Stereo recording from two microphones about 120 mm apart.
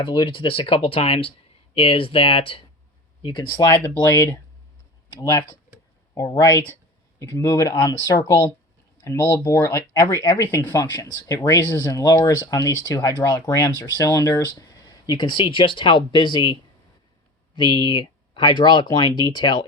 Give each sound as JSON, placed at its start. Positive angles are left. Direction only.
{"t": 0.0, "sound": "speech", "side_deg": 45}
{"t": 4.0, "sound": "speech", "side_deg": 20}
{"t": 5.0, "sound": "speech", "side_deg": 30}
{"t": 9.0, "sound": "speech", "side_deg": 25}